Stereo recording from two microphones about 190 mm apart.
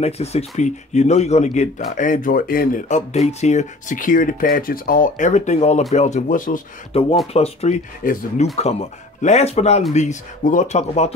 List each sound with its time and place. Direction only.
0.0 s a man's voice: 35° left (ahead or behind)
6.9 s a man's voice: 30° left (ahead or behind)